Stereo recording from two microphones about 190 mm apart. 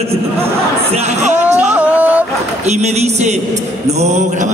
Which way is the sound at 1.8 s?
10° right (ahead or behind).